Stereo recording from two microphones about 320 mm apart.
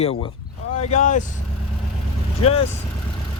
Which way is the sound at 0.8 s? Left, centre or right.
Left.